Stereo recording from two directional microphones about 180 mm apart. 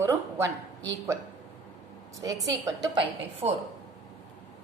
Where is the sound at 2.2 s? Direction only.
20° right (ahead or behind).